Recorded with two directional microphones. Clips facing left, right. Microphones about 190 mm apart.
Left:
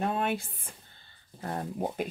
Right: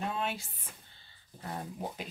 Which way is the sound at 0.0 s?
55° left (ahead or behind).